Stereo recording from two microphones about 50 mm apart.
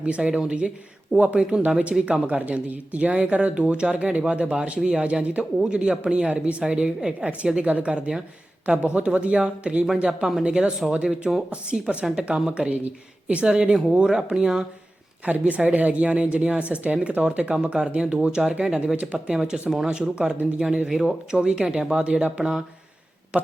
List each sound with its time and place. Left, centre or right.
0.0 s speech: right
1.1 s speech: right
1.4 s speech: centre
15.2 s speech: right